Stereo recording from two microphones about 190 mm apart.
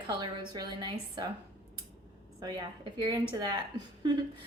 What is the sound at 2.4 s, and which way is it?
Speech, 20° right (ahead or behind).